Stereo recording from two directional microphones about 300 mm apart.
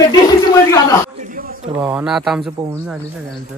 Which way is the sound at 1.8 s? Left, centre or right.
Centre.